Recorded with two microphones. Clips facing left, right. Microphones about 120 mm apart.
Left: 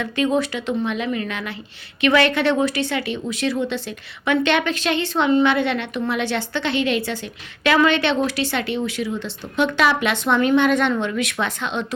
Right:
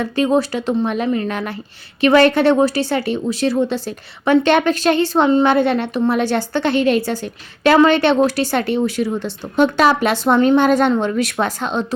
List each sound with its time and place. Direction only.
0.0 s speech: 35° right (ahead or behind)